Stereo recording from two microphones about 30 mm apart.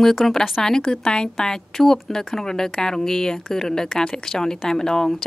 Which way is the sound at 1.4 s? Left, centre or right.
Centre.